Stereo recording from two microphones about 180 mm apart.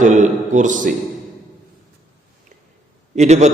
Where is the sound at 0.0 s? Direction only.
45° right (ahead or behind).